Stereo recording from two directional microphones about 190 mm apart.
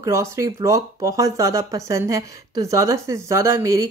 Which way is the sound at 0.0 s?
15° right (ahead or behind).